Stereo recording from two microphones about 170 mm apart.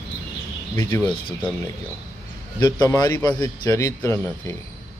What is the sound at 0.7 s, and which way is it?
Speech, 15° left (ahead or behind).